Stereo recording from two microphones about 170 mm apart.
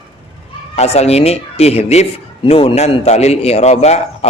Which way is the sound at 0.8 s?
40° left (ahead or behind).